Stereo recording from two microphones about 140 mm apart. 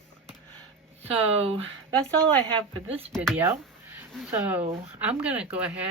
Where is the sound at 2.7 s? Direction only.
45° right (ahead or behind).